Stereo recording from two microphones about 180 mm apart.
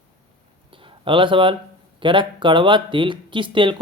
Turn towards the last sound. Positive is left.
turn(degrees=-25)  # may be behind; listen again after turning